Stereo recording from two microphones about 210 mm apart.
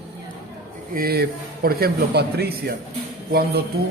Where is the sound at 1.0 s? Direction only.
45° right (ahead or behind).